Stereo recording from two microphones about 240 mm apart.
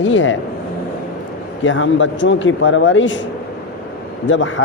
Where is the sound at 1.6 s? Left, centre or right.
Left.